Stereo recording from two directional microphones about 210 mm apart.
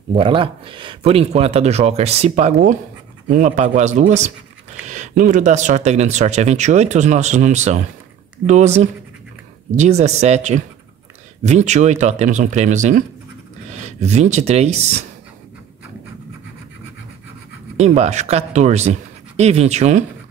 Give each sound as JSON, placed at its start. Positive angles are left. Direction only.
{"t": 0.1, "sound": "speech", "side_deg": -25}
{"t": 17.7, "sound": "speech", "side_deg": -30}